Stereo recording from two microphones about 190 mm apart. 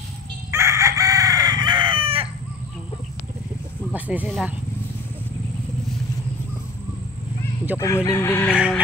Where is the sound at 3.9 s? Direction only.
10° right (ahead or behind).